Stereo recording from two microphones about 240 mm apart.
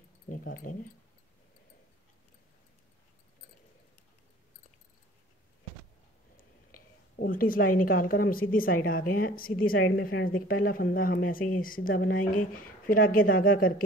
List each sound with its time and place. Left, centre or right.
0.3 s speech: left
6.3 s a woman's voice: left